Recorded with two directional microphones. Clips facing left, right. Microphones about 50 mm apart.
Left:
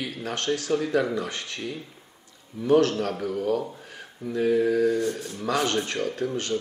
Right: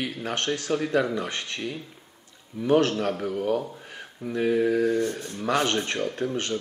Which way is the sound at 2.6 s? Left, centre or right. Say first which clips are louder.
Left 1 dB; right.